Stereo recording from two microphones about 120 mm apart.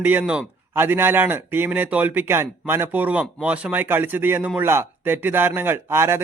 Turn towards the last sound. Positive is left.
turn(degrees=-20)  # may be behind; listen again after turning